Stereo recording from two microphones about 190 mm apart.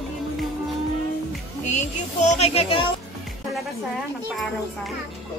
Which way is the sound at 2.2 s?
35° left (ahead or behind).